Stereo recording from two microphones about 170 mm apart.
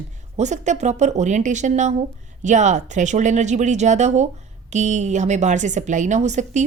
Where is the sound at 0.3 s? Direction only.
45° right (ahead or behind).